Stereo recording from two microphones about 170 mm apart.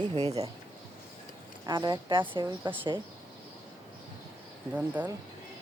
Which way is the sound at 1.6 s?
25° right (ahead or behind).